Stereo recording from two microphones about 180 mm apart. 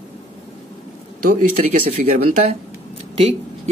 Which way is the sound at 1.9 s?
40° right (ahead or behind).